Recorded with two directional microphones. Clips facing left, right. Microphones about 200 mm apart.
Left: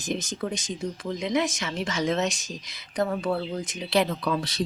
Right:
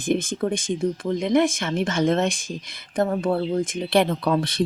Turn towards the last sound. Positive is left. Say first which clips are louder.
# right 5 dB
turn(degrees=-55)  # may be behind; listen again after turning